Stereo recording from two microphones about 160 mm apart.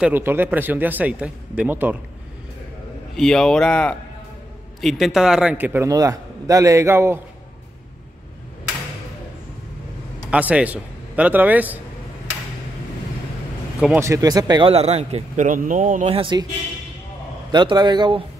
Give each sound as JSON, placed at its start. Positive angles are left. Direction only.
{"t": 0.0, "sound": "a man's voice", "side_deg": -10}
{"t": 3.2, "sound": "a man's voice", "side_deg": 5}
{"t": 10.3, "sound": "a man's voice", "side_deg": -10}
{"t": 13.9, "sound": "speech", "side_deg": -20}
{"t": 14.7, "sound": "a man's voice", "side_deg": -40}
{"t": 16.2, "sound": "speech", "side_deg": -30}
{"t": 17.5, "sound": "speech", "side_deg": -30}